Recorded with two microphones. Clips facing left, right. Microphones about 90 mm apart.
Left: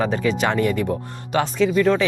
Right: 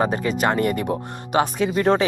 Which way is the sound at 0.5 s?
50° right (ahead or behind).